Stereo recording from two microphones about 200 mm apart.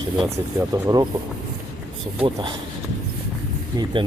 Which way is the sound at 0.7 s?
20° right (ahead or behind).